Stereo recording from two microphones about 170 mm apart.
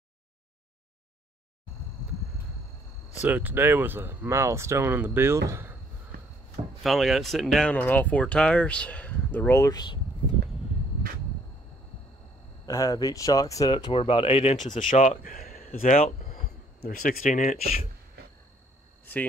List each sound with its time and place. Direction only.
3.2 s speech: 10° right (ahead or behind)
6.8 s speech: centre (ahead or behind); by 9.9 s 25° left (ahead or behind)
12.6 s speech: 20° left (ahead or behind); by 17.8 s 50° left (ahead or behind)